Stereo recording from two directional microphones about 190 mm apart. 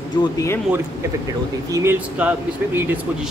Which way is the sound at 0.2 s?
15° left (ahead or behind).